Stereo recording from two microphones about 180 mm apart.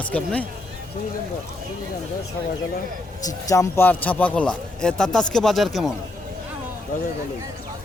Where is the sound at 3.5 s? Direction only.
15° left (ahead or behind); by 5.9 s centre (ahead or behind).